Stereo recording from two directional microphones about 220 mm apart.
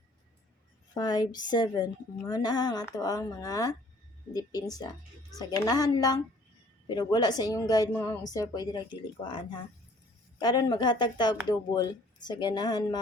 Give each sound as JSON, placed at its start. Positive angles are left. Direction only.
{"t": 0.9, "sound": "a woman's voice", "side_deg": 20}